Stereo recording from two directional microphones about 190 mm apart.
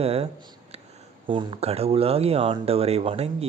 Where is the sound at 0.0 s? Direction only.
30° right (ahead or behind).